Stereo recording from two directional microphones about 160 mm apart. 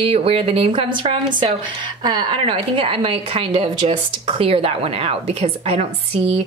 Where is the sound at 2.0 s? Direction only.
30° right (ahead or behind).